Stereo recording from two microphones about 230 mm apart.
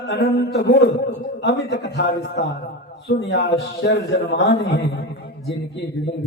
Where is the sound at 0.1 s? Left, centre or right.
Left.